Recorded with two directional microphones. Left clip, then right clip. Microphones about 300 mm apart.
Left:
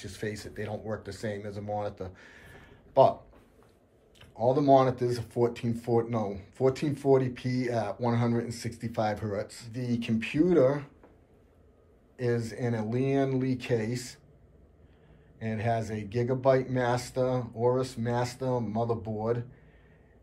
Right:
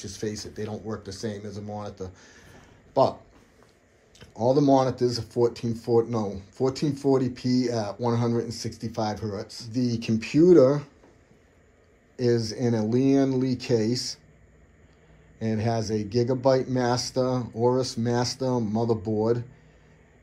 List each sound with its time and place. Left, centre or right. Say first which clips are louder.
0.0 s speech: right 4 dB; centre
4.2 s speech: right 4 dB; centre
12.2 s speech: right 6 dB; centre
15.3 s speech: right 3 dB; centre